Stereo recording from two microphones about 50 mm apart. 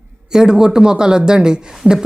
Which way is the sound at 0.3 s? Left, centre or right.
Centre.